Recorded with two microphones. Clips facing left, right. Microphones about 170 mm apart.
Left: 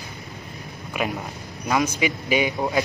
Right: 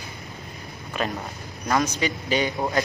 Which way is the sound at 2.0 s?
10° left (ahead or behind).